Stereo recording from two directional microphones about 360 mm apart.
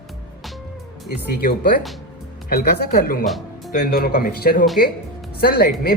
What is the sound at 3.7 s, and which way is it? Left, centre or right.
Speech, left.